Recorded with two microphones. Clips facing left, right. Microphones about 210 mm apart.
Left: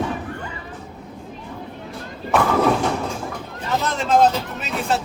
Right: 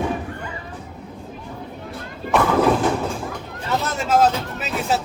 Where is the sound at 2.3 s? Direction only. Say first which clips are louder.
Right 1 dB; centre (ahead or behind).